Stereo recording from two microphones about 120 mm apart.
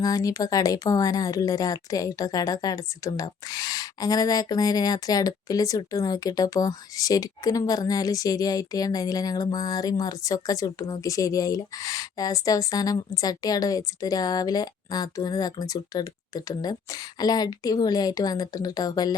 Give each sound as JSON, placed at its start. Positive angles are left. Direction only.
{"t": 0.0, "sound": "a woman's voice", "side_deg": 30}